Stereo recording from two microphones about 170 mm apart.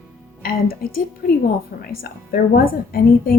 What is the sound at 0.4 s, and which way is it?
A woman's voice, 60° left (ahead or behind).